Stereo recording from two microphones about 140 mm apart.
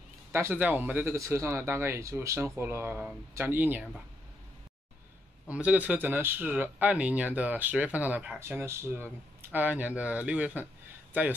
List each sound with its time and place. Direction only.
0.3 s speech: 15° right (ahead or behind)
5.5 s speech: 10° right (ahead or behind)